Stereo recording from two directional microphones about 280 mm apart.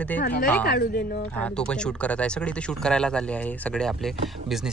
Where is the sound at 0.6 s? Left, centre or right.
Left.